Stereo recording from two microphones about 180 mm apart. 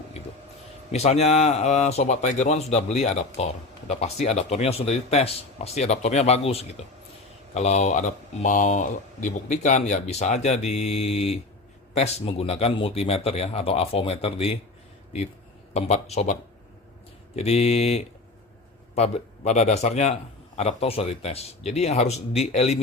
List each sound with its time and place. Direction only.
0.9 s speech: 35° left (ahead or behind)
15.7 s speech: 35° left (ahead or behind)